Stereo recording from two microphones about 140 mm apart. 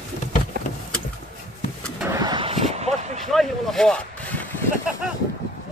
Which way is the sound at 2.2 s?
35° right (ahead or behind).